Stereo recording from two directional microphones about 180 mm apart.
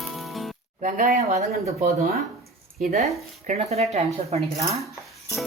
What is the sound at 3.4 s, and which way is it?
Speech, 35° right (ahead or behind).